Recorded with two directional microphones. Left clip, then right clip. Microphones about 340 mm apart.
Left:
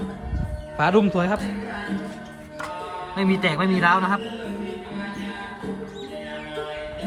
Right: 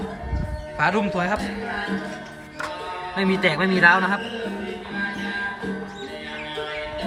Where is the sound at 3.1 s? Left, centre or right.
Centre.